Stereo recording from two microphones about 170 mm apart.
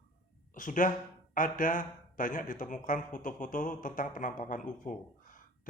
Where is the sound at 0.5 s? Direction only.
50° left (ahead or behind).